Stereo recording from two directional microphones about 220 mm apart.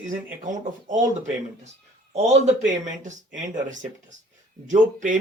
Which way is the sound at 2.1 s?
30° right (ahead or behind).